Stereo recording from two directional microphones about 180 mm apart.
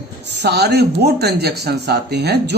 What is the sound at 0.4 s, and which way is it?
Speech, 65° right (ahead or behind).